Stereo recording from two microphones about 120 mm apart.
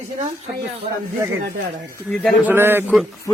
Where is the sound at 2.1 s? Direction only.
10° left (ahead or behind).